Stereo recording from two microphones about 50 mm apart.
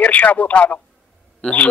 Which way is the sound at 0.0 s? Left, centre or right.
Left.